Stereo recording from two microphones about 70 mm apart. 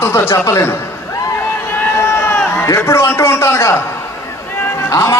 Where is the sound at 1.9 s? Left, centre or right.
Left.